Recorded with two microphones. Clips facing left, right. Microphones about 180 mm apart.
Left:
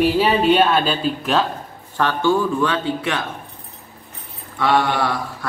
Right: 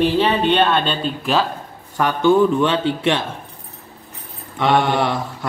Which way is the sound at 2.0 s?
15° right (ahead or behind).